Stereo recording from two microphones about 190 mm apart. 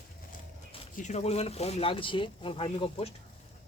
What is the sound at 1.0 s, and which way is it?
Speech, 35° left (ahead or behind).